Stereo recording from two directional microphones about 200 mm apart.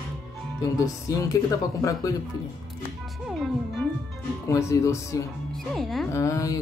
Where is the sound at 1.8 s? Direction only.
15° left (ahead or behind).